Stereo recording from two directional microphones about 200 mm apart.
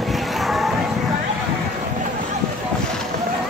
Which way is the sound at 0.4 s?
Centre (ahead or behind).